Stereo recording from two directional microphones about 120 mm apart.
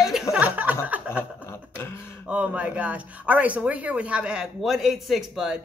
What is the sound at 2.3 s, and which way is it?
Speech, 10° right (ahead or behind).